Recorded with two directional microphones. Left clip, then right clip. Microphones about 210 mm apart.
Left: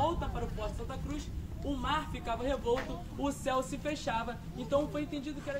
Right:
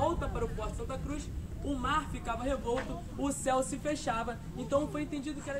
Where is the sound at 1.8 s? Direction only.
5° right (ahead or behind).